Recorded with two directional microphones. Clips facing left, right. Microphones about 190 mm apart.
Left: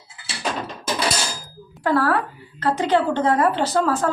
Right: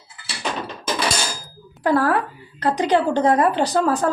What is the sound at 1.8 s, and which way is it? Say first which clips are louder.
Speech: right 1 dB; 15° right (ahead or behind).